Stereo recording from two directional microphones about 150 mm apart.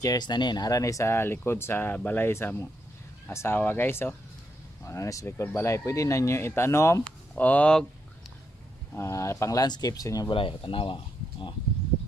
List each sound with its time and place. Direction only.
0.0 s speech: 25° left (ahead or behind); by 7.8 s 10° left (ahead or behind)
8.9 s speech: 20° left (ahead or behind)
10.3 s speech: 35° left (ahead or behind)